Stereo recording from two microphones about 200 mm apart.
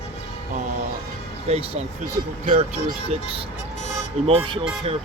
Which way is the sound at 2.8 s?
30° right (ahead or behind).